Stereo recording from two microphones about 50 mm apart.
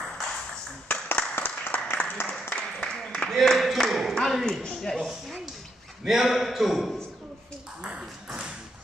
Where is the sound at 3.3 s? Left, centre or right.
Centre.